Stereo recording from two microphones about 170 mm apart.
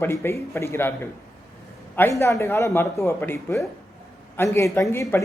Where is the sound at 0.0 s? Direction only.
15° left (ahead or behind).